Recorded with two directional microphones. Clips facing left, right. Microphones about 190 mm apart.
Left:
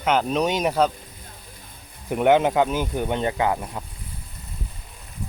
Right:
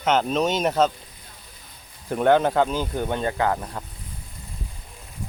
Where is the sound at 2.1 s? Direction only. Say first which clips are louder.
Left 1 dB; 15° left (ahead or behind).